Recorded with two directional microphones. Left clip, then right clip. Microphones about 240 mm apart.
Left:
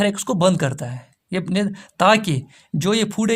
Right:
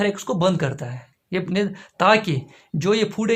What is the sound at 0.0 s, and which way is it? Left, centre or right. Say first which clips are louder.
Speech: left 2 dB; left.